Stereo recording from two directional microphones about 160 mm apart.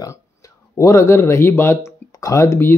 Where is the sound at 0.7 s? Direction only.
20° left (ahead or behind).